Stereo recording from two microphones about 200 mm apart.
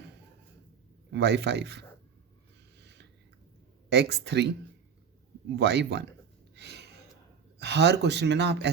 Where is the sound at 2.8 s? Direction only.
55° right (ahead or behind).